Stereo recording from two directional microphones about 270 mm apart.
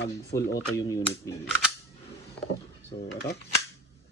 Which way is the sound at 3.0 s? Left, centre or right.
Left.